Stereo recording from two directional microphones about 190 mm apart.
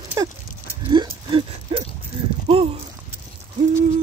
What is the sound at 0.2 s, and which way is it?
Livestock, 20° right (ahead or behind).